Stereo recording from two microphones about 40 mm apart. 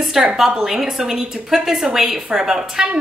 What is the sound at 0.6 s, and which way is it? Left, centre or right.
A woman's voice, centre.